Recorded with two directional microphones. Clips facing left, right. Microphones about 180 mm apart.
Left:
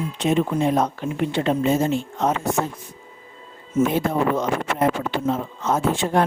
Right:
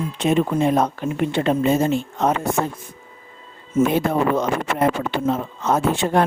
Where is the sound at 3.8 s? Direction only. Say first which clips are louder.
Right 2 dB; 65° right (ahead or behind).